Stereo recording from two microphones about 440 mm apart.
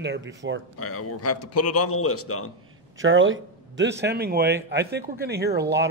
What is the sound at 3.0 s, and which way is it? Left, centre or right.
Speech, right.